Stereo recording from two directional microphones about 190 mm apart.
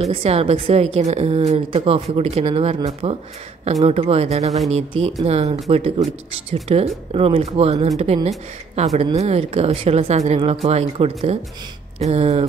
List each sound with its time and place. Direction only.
0.0 s a woman's voice: 30° right (ahead or behind)